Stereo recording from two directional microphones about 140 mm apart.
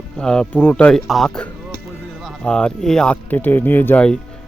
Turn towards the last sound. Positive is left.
turn(degrees=10)  # may be behind; listen again after turning